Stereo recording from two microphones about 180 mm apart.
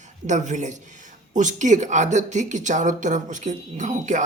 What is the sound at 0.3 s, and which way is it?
Speech, 40° right (ahead or behind).